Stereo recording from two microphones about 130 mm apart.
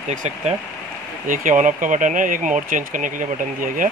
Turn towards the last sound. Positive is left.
turn(degrees=-90)